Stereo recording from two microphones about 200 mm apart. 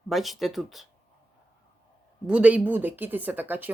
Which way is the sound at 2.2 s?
5° right (ahead or behind).